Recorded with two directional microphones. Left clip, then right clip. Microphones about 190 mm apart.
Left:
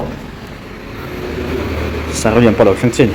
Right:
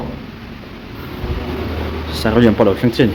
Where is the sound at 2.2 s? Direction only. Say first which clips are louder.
Left 3 dB; 15° right (ahead or behind).